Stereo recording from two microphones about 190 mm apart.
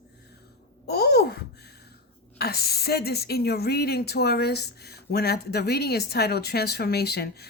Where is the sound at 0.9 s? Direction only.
60° left (ahead or behind).